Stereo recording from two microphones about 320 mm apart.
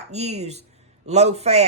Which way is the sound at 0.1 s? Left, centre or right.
Right.